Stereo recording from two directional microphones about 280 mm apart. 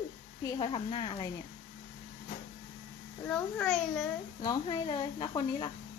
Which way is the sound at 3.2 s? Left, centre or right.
Centre.